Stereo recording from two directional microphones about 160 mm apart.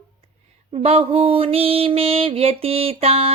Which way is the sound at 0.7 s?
40° right (ahead or behind).